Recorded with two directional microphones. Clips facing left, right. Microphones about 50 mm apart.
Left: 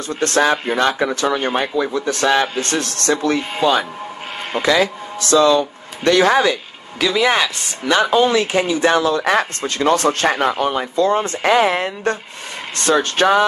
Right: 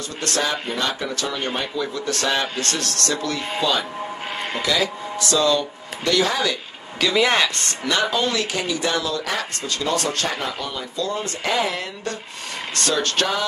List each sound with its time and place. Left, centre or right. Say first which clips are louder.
0.4 s speech: left 8 dB; left
4.6 s speech: left 7 dB; left
7.0 s speech: left 2 dB; centre
7.9 s speech: left 7 dB; left
11.4 s speech: left 8 dB; left